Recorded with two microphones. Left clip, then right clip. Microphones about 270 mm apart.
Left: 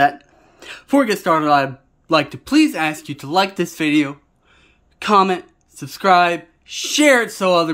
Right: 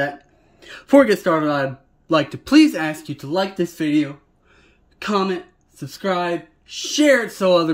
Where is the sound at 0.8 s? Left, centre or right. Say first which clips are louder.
Right 3 dB; centre.